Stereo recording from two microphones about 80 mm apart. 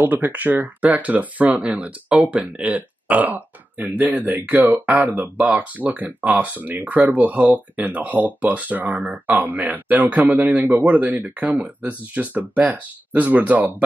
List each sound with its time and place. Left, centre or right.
0.0 s speech: right